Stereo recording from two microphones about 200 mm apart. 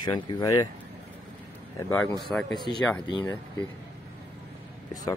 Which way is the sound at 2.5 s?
20° left (ahead or behind).